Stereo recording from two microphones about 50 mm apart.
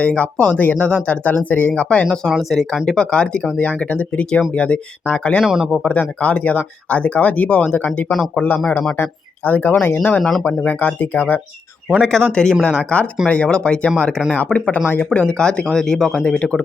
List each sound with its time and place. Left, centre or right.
0.0 s speech: left
2.5 s speech: centre; by 5.4 s left
5.4 s speech: centre
5.9 s speech: left
11.9 s speech: centre
14.3 s speech: left
15.2 s speech: centre